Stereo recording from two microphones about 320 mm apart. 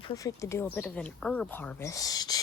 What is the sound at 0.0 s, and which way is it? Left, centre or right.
Speech, centre.